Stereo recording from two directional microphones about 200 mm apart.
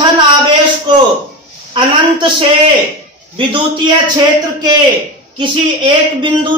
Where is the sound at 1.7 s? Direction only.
25° right (ahead or behind).